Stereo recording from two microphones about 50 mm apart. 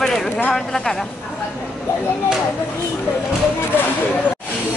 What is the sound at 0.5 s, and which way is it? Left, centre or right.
Speech, centre.